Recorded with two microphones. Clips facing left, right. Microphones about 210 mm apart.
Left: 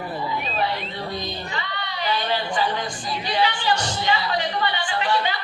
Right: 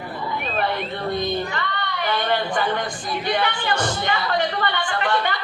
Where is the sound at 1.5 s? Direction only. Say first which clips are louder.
Right 3 dB; 55° right (ahead or behind).